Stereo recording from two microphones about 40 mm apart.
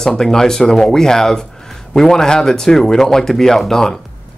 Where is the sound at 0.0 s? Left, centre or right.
Centre.